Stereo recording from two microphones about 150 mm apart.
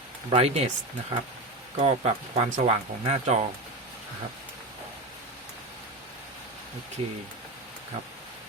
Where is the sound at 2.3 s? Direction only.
40° right (ahead or behind).